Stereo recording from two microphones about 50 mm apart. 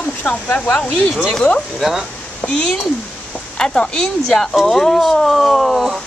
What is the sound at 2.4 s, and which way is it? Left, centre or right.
Speech, left.